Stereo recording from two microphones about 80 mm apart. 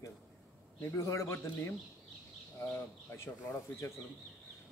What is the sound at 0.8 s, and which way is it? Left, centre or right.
Speech, left.